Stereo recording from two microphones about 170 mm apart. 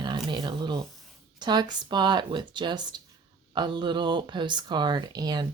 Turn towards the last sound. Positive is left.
turn(degrees=-25)  # may be behind; listen again after turning